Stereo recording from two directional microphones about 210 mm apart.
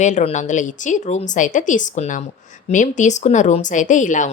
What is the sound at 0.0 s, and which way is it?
A woman's voice, 35° left (ahead or behind).